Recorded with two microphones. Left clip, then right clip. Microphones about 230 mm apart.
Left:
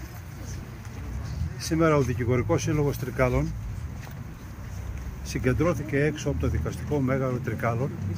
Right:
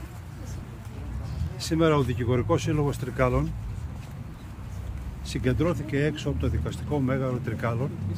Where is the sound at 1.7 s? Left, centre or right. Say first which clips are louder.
Even; centre.